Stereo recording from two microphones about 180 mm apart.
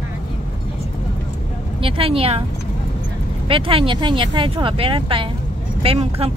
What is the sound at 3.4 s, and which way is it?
Speech, 30° right (ahead or behind).